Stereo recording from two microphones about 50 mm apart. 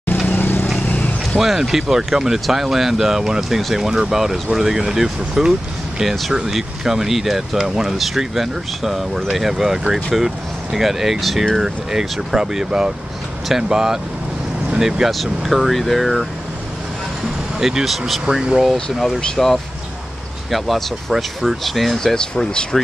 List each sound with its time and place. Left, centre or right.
0.3 s vehicle: left
1.4 s speech: centre
15.0 s speech: centre
17.6 s speech: centre
18.2 s speech: centre
18.6 s speech: centre